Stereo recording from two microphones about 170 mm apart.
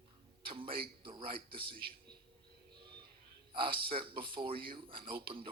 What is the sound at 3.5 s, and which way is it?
A man's voice, 30° right (ahead or behind).